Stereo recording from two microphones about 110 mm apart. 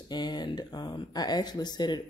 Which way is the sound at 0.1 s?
40° left (ahead or behind).